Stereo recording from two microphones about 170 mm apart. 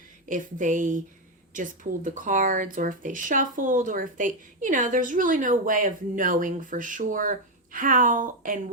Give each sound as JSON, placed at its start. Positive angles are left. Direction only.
{"t": 0.3, "sound": "speech", "side_deg": -50}